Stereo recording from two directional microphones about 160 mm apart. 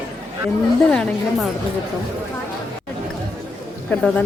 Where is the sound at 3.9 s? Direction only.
5° left (ahead or behind).